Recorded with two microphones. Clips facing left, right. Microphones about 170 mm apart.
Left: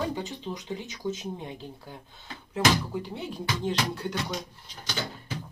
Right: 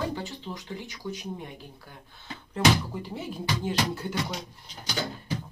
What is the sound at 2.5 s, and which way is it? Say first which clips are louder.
Speech: right 1 dB; centre (ahead or behind).